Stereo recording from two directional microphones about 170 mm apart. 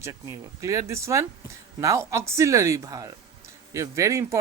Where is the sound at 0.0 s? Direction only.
15° right (ahead or behind).